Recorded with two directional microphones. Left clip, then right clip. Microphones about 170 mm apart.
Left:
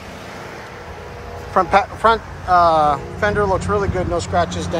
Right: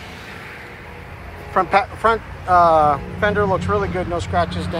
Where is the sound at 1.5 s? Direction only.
15° left (ahead or behind).